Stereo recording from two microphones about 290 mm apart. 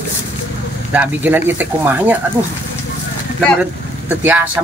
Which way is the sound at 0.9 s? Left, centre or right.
Centre.